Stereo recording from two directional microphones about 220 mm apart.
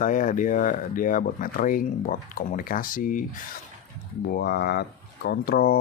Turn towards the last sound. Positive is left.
turn(degrees=40)  # may be behind; listen again after turning